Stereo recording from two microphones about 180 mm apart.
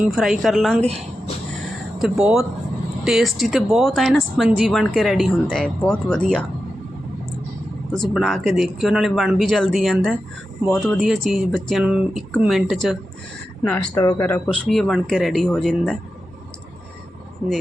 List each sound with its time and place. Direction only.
0.0 s speech: centre (ahead or behind)
2.0 s speech: centre (ahead or behind)
7.9 s speech: centre (ahead or behind)
13.9 s speech: 15° left (ahead or behind)